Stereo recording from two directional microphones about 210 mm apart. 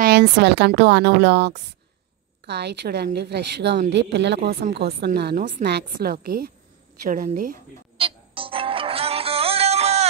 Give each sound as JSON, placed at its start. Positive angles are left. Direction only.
{"t": 0.0, "sound": "a woman's voice", "side_deg": -50}
{"t": 8.0, "sound": "music", "side_deg": -25}